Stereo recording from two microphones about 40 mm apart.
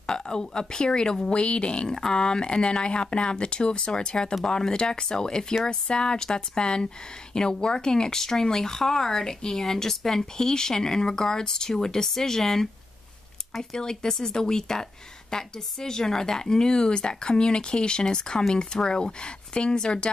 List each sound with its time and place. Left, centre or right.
0.0 s a woman's voice: centre